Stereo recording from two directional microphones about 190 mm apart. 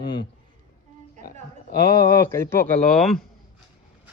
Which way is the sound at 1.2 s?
55° left (ahead or behind).